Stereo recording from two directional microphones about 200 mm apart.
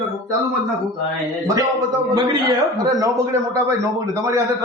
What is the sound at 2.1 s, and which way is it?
A man's voice, 20° right (ahead or behind).